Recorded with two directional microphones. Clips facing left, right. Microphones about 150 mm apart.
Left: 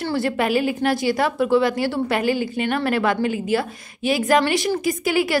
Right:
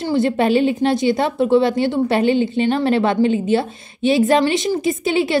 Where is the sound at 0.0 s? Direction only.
20° right (ahead or behind).